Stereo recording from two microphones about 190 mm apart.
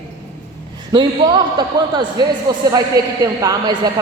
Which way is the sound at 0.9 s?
20° right (ahead or behind).